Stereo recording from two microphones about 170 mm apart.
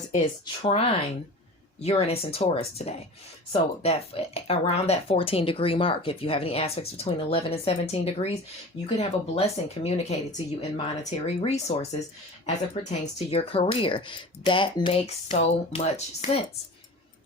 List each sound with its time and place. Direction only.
0.4 s speech: 30° left (ahead or behind)